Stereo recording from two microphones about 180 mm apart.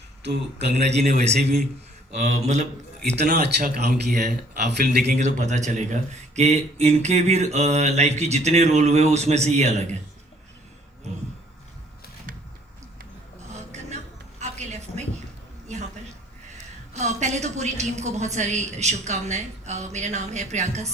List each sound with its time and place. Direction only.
0.6 s speech: 35° right (ahead or behind)
3.1 s speech: 65° right (ahead or behind)
5.1 s speech: 40° right (ahead or behind)
13.9 s music: 40° right (ahead or behind)
16.9 s speech: 40° right (ahead or behind)